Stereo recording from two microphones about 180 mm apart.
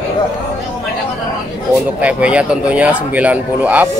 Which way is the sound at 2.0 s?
5° right (ahead or behind).